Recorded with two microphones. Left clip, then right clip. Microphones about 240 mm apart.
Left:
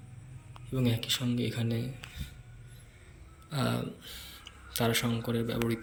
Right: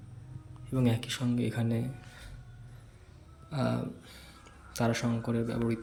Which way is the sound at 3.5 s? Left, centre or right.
Centre.